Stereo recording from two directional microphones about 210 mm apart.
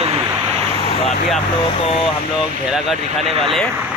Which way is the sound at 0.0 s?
25° right (ahead or behind).